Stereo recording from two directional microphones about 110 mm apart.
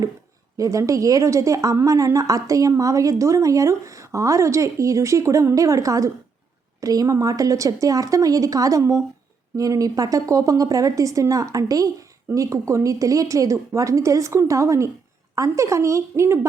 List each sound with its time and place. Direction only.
0.5 s a woman's voice: 30° right (ahead or behind)